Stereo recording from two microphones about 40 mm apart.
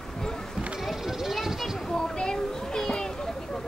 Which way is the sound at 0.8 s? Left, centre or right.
Centre.